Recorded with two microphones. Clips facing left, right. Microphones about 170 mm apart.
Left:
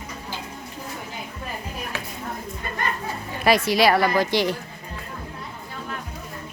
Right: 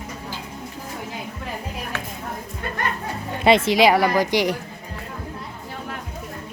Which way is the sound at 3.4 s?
25° right (ahead or behind).